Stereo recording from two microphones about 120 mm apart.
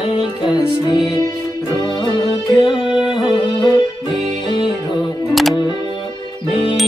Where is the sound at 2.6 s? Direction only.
45° left (ahead or behind).